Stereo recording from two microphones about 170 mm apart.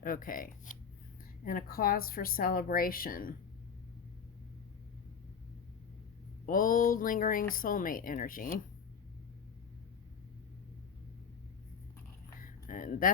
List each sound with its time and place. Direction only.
0.0 s speech: 55° left (ahead or behind)
6.4 s speech: 55° left (ahead or behind)
12.4 s a sound: 50° left (ahead or behind)